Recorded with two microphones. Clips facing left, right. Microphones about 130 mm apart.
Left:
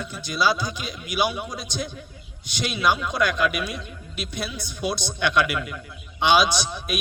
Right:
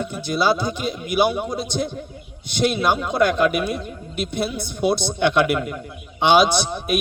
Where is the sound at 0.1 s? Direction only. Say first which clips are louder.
Right 2 dB; 55° right (ahead or behind).